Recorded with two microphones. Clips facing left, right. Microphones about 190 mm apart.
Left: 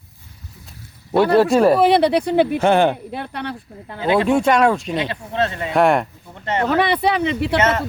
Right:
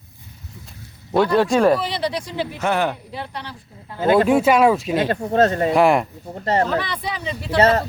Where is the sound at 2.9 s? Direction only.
55° left (ahead or behind).